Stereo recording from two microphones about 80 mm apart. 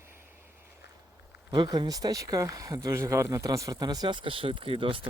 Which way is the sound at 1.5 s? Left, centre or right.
Right.